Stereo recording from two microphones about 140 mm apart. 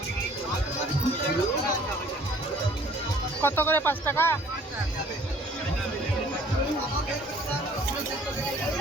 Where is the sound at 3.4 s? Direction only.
15° left (ahead or behind).